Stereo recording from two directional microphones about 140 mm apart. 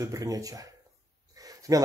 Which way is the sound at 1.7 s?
25° right (ahead or behind).